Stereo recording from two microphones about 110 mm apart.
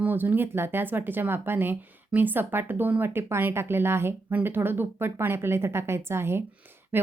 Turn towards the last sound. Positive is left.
turn(degrees=-20)  # may be behind; listen again after turning